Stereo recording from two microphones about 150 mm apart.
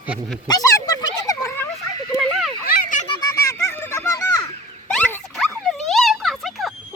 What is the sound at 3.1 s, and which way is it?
Children playing, 25° left (ahead or behind).